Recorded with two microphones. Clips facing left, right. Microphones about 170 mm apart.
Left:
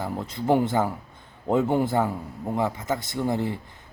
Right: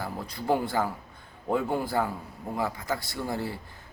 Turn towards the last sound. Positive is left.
turn(degrees=20)  # may be behind; listen again after turning